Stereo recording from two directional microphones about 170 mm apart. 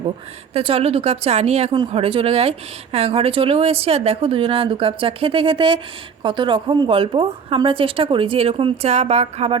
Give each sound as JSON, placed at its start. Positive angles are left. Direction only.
{"t": 0.5, "sound": "speech", "side_deg": -35}